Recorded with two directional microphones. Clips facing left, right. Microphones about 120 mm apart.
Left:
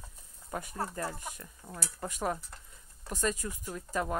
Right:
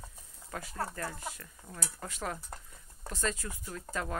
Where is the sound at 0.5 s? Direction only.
20° left (ahead or behind).